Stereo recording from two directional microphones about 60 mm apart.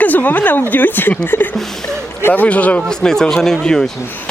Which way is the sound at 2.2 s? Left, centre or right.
Left.